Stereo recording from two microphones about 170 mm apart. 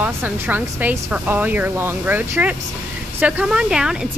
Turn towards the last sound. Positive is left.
turn(degrees=-5)  # may be behind; listen again after turning